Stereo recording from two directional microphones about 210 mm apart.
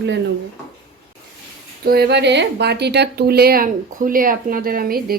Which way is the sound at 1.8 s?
50° right (ahead or behind).